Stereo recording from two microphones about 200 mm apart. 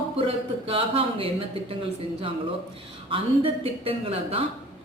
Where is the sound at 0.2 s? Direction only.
25° right (ahead or behind).